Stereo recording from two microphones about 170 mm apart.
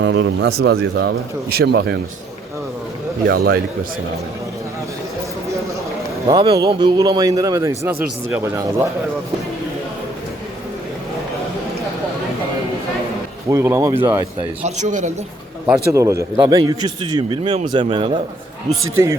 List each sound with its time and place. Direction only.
0.0 s speech: 90° right; by 2.0 s 75° right (ahead or behind)
3.2 s a man's voice: 65° right (ahead or behind)
6.2 s a man's voice: 30° right (ahead or behind); by 8.9 s 15° right (ahead or behind)
13.5 s speech: 15° right (ahead or behind)
14.6 s speech: 45° right (ahead or behind)
15.6 s a man's voice: 15° right (ahead or behind)